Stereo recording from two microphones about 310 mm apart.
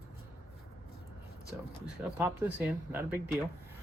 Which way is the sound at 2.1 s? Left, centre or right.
Centre.